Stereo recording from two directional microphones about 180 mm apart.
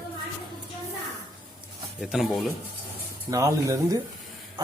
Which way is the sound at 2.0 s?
Centre (ahead or behind).